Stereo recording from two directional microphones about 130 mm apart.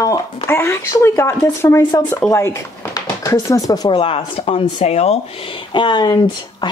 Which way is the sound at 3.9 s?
45° left (ahead or behind).